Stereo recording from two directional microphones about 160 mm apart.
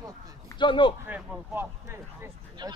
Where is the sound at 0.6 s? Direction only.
30° left (ahead or behind).